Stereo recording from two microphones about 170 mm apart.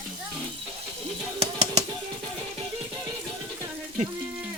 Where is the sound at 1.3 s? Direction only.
40° right (ahead or behind).